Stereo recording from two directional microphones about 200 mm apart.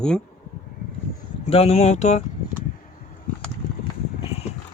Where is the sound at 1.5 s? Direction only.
30° left (ahead or behind).